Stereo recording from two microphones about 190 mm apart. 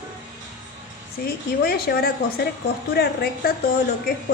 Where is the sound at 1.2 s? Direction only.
50° left (ahead or behind).